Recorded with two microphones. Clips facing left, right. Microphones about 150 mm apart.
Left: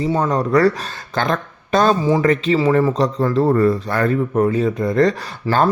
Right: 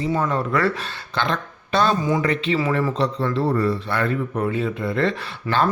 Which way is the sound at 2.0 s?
30° left (ahead or behind).